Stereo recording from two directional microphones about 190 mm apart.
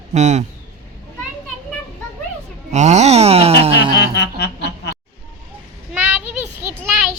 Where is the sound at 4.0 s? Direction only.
65° left (ahead or behind).